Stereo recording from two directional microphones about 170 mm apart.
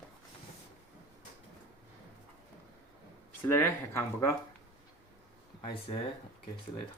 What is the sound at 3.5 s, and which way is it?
Speech, 15° left (ahead or behind).